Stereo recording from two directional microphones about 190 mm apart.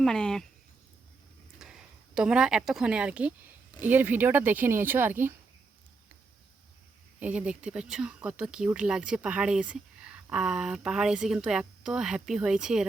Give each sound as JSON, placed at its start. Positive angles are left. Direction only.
{"t": 0.0, "sound": "speech", "side_deg": 5}
{"t": 1.5, "sound": "speech", "side_deg": -5}
{"t": 7.2, "sound": "speech", "side_deg": -5}